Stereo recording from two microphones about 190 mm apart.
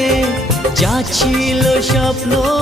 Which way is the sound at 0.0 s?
Centre (ahead or behind).